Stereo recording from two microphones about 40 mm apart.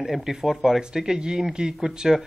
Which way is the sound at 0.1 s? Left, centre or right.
Centre.